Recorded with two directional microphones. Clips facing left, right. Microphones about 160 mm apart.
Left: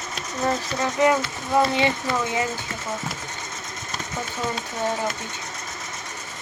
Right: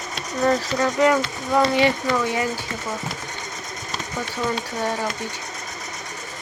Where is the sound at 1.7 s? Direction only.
20° left (ahead or behind).